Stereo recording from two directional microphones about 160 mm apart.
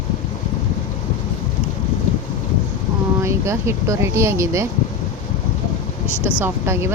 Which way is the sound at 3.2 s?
15° right (ahead or behind).